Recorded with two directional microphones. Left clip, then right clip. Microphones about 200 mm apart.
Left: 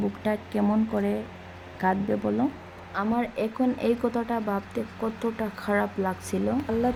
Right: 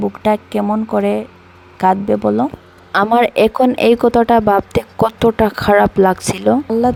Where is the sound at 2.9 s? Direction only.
45° right (ahead or behind).